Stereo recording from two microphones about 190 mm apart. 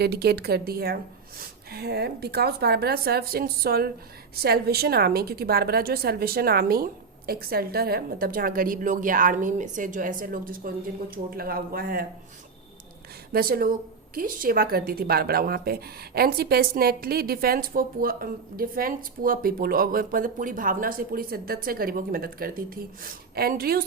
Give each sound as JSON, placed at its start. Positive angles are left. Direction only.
{"t": 0.0, "sound": "a woman's voice", "side_deg": -55}
{"t": 13.3, "sound": "speech", "side_deg": -50}